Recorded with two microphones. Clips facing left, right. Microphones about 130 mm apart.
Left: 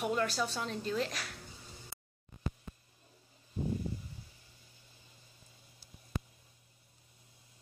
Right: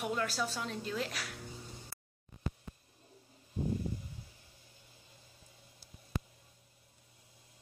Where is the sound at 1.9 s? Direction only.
25° left (ahead or behind).